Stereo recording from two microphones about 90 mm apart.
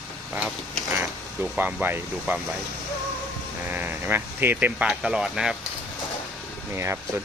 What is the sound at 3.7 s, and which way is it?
Speech, 20° right (ahead or behind).